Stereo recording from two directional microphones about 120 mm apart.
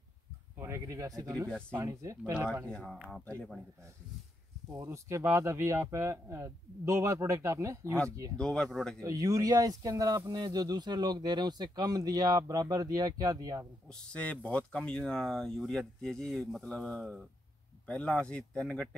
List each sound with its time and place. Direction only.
0.6 s speech: 25° right (ahead or behind)
2.3 s speech: 15° right (ahead or behind)
2.6 s speech: 10° left (ahead or behind)
4.7 s speech: 25° right (ahead or behind)
8.4 s speech: 5° left (ahead or behind)
9.0 s speech: 30° right (ahead or behind)
13.8 s speech: 10° left (ahead or behind)